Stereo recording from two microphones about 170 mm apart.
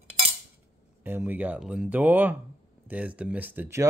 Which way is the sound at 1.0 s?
10° right (ahead or behind).